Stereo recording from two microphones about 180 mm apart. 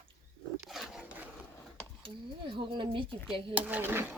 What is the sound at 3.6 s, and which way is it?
Speech, 10° right (ahead or behind).